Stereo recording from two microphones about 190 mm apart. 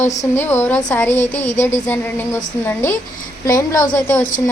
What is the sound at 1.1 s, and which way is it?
Speech, 40° left (ahead or behind).